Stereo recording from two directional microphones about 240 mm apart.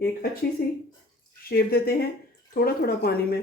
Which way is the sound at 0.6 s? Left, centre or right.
Left.